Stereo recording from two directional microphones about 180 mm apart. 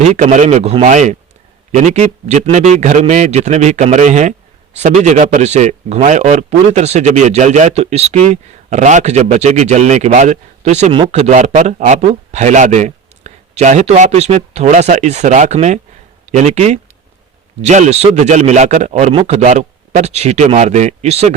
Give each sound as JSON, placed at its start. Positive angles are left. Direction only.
{"t": 0.0, "sound": "a man's voice", "side_deg": -40}